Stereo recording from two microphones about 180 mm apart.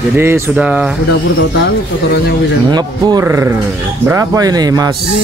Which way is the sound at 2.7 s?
20° right (ahead or behind).